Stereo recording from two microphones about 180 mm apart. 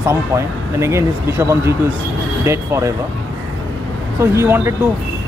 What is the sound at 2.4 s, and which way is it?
Speech, 15° right (ahead or behind).